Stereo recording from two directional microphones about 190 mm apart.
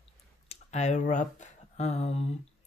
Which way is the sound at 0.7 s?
35° left (ahead or behind).